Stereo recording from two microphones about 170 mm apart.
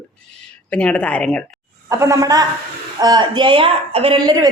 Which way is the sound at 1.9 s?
15° right (ahead or behind).